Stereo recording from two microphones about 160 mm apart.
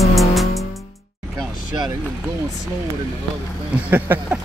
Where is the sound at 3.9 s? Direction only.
10° right (ahead or behind).